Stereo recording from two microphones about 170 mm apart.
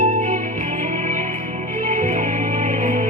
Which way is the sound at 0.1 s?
50° right (ahead or behind).